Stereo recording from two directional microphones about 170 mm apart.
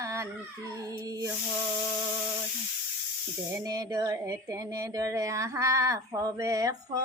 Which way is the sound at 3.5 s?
20° right (ahead or behind).